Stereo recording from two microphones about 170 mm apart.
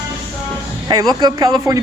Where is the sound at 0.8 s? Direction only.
25° right (ahead or behind).